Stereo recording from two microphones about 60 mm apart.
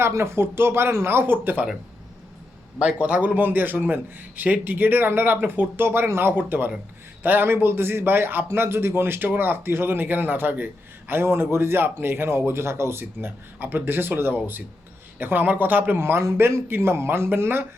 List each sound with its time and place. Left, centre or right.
0.1 s speech: right
3.0 s a man's voice: right
11.1 s a man's voice: right
16.0 s speech: right